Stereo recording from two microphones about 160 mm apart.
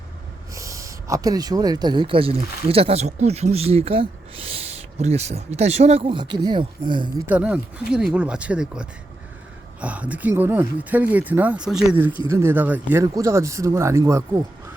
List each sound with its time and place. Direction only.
0.5 s speech: 20° right (ahead or behind)
7.3 s speech: 5° right (ahead or behind)